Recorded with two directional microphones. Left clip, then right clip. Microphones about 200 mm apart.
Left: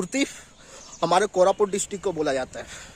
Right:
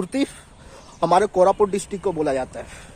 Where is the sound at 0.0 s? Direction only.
10° left (ahead or behind).